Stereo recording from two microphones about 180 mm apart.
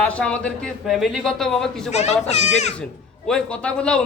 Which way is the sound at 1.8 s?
35° left (ahead or behind).